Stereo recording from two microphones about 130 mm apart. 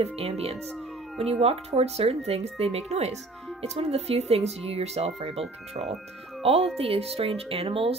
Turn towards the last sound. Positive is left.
turn(degrees=-50)  # may be behind; listen again after turning